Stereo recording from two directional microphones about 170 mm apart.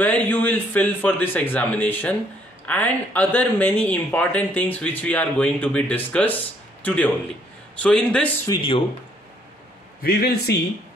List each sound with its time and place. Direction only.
0.0 s a man's voice: 10° left (ahead or behind)
8.5 s speech: 30° left (ahead or behind)
10.0 s a man's voice: 70° left (ahead or behind)